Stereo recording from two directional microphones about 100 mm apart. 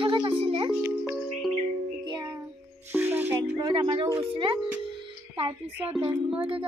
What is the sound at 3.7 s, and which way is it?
Speech, 60° right (ahead or behind).